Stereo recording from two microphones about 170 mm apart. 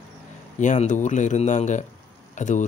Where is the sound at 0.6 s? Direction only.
45° left (ahead or behind).